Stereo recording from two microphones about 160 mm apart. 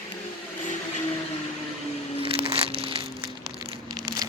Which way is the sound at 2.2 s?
35° right (ahead or behind).